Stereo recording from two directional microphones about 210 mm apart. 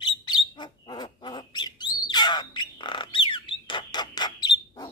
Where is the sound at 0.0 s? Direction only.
20° left (ahead or behind).